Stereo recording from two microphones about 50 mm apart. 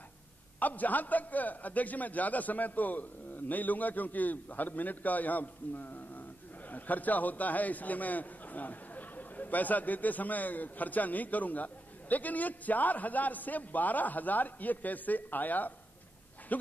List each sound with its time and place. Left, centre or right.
0.6 s a man's voice: left